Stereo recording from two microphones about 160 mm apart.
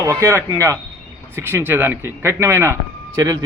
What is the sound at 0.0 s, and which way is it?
A man's voice, 15° right (ahead or behind).